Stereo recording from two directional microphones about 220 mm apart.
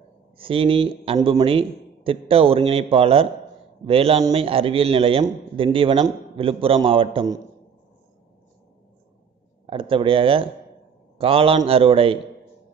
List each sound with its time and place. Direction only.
0.4 s a man's voice: 25° right (ahead or behind)
9.7 s a man's voice: 25° right (ahead or behind)